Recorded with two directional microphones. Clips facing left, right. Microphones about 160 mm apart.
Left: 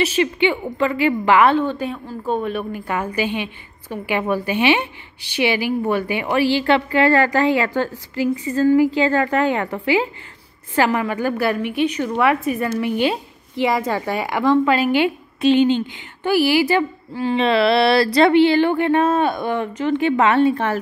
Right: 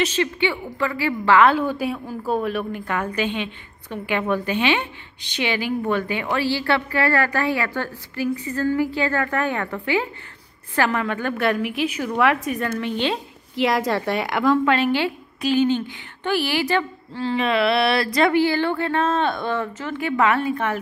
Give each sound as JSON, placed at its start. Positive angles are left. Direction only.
{"t": 0.0, "sound": "a woman's voice", "side_deg": 15}
{"t": 1.6, "sound": "a woman's voice", "side_deg": -10}
{"t": 15.4, "sound": "speech", "side_deg": 20}
{"t": 16.2, "sound": "a woman's voice", "side_deg": 10}
{"t": 17.4, "sound": "speech", "side_deg": 35}